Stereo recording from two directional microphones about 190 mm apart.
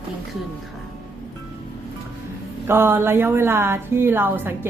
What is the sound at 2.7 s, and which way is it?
A woman's voice, 10° right (ahead or behind).